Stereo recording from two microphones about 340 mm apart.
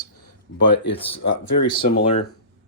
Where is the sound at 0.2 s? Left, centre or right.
Left.